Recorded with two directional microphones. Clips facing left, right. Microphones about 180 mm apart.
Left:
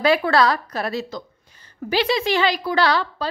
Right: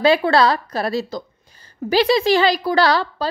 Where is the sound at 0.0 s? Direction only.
30° right (ahead or behind).